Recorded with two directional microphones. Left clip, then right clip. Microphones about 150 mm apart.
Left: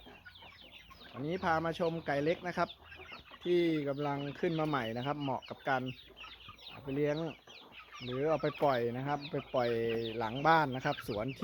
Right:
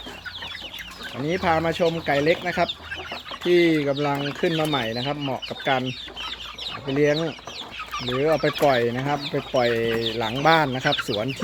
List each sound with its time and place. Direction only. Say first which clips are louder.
1.3 s speech: right 11 dB; 25° left (ahead or behind)
6.8 s speech: right 13 dB; 15° left (ahead or behind)
7.9 s chicken: right 14 dB; 10° right (ahead or behind)
8.2 s speech: right 11 dB; 25° left (ahead or behind)